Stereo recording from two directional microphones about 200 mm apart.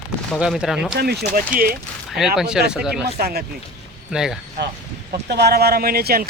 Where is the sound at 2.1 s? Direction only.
Centre (ahead or behind).